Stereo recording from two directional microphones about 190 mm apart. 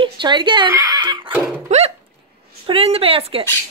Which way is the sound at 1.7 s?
35° right (ahead or behind).